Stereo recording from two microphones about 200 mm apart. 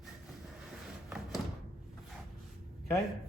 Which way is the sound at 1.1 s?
Centre (ahead or behind).